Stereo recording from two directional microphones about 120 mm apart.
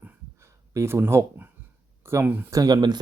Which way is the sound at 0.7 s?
25° right (ahead or behind).